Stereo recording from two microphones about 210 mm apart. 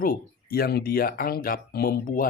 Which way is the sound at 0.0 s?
45° left (ahead or behind).